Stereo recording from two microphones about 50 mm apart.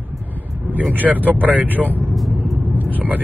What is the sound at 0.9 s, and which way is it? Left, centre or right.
Speech, right.